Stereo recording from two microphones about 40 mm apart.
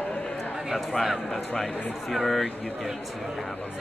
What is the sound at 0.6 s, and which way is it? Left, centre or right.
Speech, centre.